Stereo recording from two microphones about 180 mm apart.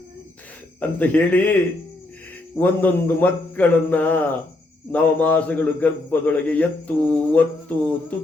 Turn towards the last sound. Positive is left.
turn(degrees=5)  # may be behind; listen again after turning